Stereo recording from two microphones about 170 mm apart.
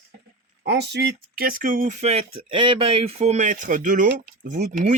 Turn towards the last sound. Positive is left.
turn(degrees=-50)  # may be behind; listen again after turning